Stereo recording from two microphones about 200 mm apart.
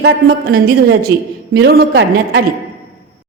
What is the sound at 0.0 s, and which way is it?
Speech, 50° right (ahead or behind).